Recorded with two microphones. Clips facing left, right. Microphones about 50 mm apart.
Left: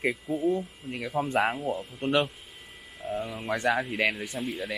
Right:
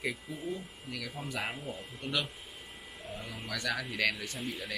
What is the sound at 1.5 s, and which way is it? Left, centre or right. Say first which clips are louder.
Speech: left 10 dB; left.